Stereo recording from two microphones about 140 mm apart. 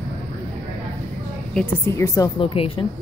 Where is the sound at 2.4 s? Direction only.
40° left (ahead or behind).